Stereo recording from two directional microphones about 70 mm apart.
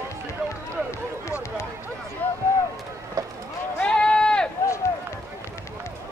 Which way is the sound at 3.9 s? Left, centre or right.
Centre.